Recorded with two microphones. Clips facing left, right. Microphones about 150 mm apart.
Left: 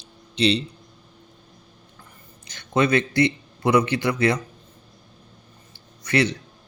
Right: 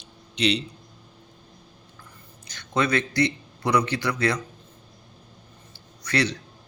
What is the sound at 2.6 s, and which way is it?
A man's voice, 25° left (ahead or behind).